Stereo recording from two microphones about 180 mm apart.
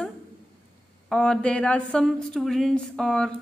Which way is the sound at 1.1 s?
5° left (ahead or behind).